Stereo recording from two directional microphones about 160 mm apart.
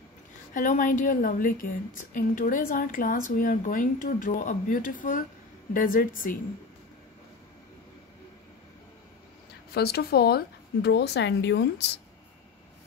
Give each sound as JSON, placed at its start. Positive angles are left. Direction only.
{"t": 0.6, "sound": "a woman's voice", "side_deg": 55}
{"t": 9.8, "sound": "speech", "side_deg": 80}